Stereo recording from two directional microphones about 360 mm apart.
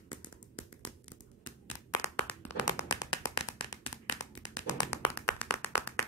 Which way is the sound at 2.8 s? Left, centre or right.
Centre.